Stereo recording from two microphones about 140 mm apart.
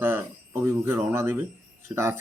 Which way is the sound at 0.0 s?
15° right (ahead or behind).